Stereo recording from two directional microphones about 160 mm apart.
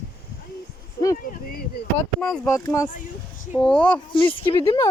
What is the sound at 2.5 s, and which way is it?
Speech, 20° left (ahead or behind).